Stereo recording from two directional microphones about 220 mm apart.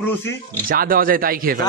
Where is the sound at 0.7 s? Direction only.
40° right (ahead or behind).